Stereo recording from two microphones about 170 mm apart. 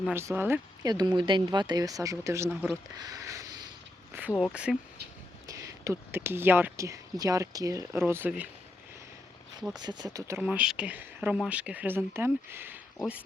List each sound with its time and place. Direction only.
0.1 s speech: 15° right (ahead or behind)
2.5 s speech: centre (ahead or behind)
3.0 s speech: 20° right (ahead or behind)
5.5 s speech: 20° right (ahead or behind)
9.8 s speech: 25° right (ahead or behind)
10.4 s speech: 5° right (ahead or behind)